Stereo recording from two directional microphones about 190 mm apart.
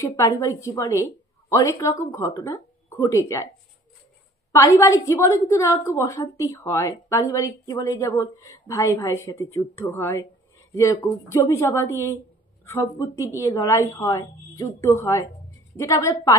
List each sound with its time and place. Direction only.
0.0 s a woman's voice: 15° left (ahead or behind)
4.5 s a woman's voice: 15° left (ahead or behind)